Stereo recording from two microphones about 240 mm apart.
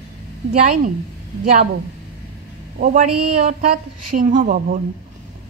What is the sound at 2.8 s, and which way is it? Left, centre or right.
A woman's voice, right.